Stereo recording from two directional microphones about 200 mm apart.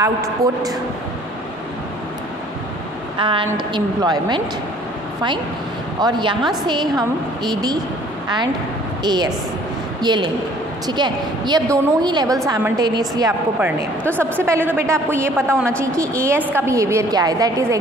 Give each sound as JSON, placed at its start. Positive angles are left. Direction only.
{"t": 0.0, "sound": "a woman's voice", "side_deg": -15}
{"t": 3.2, "sound": "a woman's voice", "side_deg": -25}
{"t": 5.9, "sound": "a woman's voice", "side_deg": -20}
{"t": 9.0, "sound": "a woman's voice", "side_deg": -20}
{"t": 13.6, "sound": "a woman's voice", "side_deg": -10}
{"t": 15.4, "sound": "a woman's voice", "side_deg": 5}
{"t": 16.0, "sound": "a woman's voice", "side_deg": -15}